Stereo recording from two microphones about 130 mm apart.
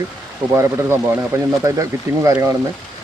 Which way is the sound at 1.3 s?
25° right (ahead or behind).